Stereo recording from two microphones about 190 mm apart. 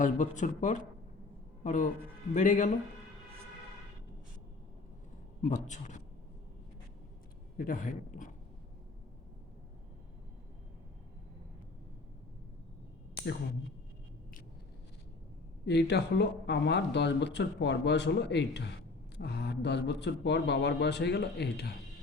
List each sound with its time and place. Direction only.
0.0 s speech: 40° left (ahead or behind)
5.4 s speech: 40° left (ahead or behind)
7.5 s a man's voice: 45° left (ahead or behind)
15.6 s speech: 60° left (ahead or behind)